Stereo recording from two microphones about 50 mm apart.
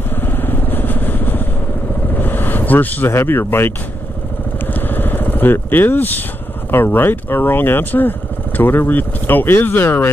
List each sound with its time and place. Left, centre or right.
0.1 s vehicle: left
3.1 s speech: left
4.7 s vehicle: left
6.7 s speech: left